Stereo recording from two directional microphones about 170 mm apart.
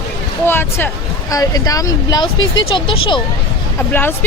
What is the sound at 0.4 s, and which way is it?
Speech, 15° left (ahead or behind).